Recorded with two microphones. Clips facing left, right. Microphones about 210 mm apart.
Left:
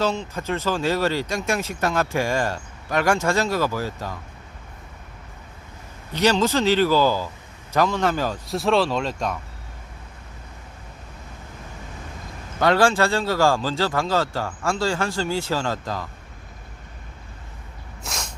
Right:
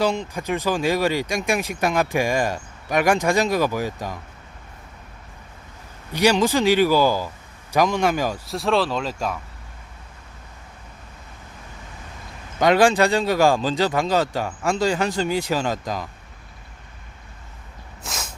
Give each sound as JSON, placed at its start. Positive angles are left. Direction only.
{"t": 0.0, "sound": "speech", "side_deg": -15}
{"t": 6.1, "sound": "speech", "side_deg": -15}
{"t": 8.4, "sound": "speech", "side_deg": 0}
{"t": 12.5, "sound": "speech", "side_deg": -15}
{"t": 18.0, "sound": "a sound", "side_deg": 0}